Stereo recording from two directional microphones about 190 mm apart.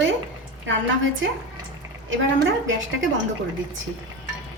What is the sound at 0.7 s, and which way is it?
Speech, 75° right (ahead or behind).